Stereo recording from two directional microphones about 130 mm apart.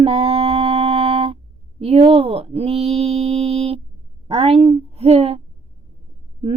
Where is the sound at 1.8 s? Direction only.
50° right (ahead or behind).